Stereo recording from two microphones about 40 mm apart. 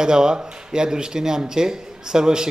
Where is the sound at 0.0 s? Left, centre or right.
Centre.